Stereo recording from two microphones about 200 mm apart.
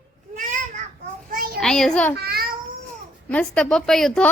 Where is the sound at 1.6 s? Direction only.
5° left (ahead or behind).